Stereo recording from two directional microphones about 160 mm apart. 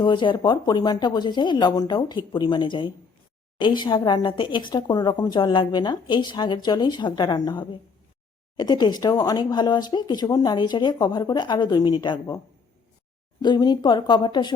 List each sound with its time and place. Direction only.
0.0 s speech: 30° left (ahead or behind)
13.4 s speech: 25° left (ahead or behind)